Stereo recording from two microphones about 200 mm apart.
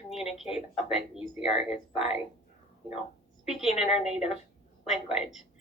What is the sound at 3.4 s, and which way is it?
Speech, centre (ahead or behind).